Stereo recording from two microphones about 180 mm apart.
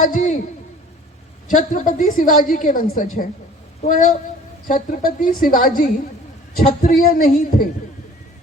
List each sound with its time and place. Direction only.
0.0 s a man's voice: 50° left (ahead or behind)
1.5 s a woman's voice: 45° left (ahead or behind)